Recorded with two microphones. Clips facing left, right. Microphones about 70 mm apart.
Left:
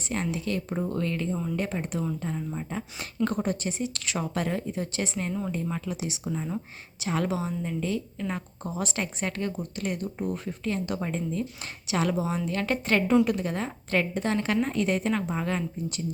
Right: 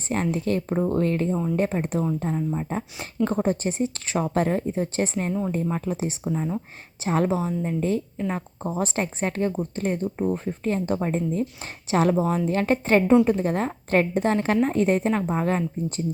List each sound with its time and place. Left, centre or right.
0.1 s speech: right